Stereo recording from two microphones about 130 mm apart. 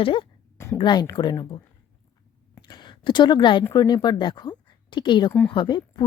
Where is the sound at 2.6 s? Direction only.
35° left (ahead or behind).